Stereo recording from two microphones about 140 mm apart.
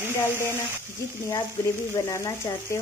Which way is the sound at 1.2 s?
20° left (ahead or behind).